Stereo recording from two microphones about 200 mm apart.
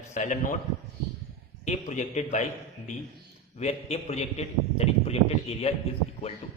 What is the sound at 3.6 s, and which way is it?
A man's voice, 35° left (ahead or behind).